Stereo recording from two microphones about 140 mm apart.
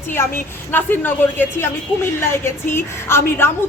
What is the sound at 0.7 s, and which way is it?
A woman's voice, 15° left (ahead or behind).